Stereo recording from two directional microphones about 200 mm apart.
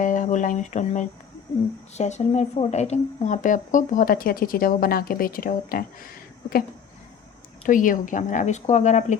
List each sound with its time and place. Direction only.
0.0 s speech: 40° left (ahead or behind)
7.6 s speech: 40° left (ahead or behind)